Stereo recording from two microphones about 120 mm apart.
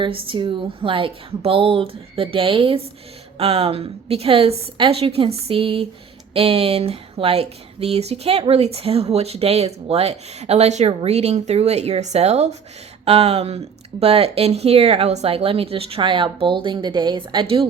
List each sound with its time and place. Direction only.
0.0 s speech: 45° right (ahead or behind)